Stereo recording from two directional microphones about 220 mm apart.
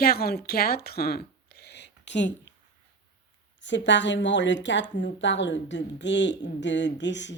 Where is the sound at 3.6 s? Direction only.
55° left (ahead or behind).